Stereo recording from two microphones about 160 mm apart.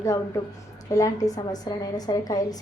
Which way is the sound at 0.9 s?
20° left (ahead or behind).